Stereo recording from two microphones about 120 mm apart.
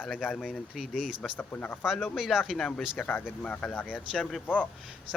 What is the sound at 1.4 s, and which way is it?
Speech, 15° left (ahead or behind).